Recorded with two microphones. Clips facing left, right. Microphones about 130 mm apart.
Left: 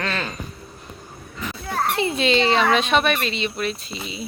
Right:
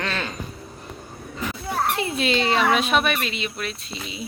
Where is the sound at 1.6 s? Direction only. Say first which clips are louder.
Left 2 dB; 5° right (ahead or behind).